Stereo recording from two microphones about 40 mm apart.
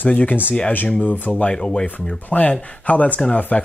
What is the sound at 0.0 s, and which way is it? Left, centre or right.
Speech, left.